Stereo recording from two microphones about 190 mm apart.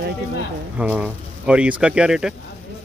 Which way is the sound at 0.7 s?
5° right (ahead or behind).